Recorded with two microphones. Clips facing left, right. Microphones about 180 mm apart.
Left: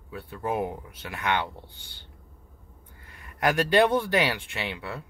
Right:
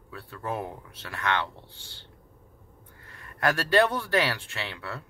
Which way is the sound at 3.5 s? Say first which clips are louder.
Left 2 dB; 20° left (ahead or behind).